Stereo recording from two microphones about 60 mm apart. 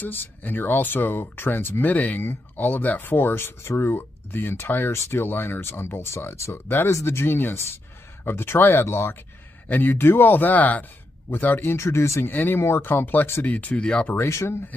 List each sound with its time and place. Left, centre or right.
0.0 s speech: left
9.7 s speech: left
12.3 s speech: left; by 14.0 s centre
14.1 s speech: left